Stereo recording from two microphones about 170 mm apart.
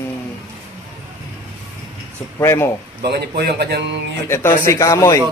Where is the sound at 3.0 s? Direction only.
70° right (ahead or behind).